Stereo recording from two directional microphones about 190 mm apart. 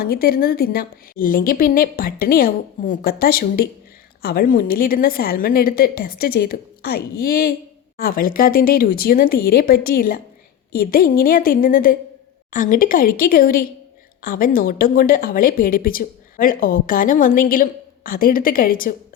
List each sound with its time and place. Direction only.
0.0 s speech: 50° left (ahead or behind)